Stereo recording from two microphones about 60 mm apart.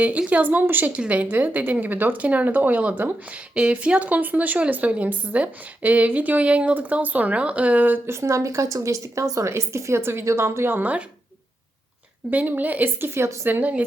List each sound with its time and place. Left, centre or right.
0.0 s a woman's voice: right
8.1 s a woman's voice: right
12.3 s a woman's voice: right
13.5 s a woman's voice: right